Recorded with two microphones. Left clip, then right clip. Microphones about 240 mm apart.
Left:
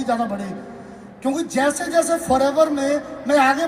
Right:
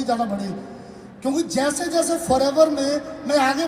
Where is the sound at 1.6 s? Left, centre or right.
Left.